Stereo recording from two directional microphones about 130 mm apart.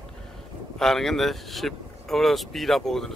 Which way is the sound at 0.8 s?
5° left (ahead or behind).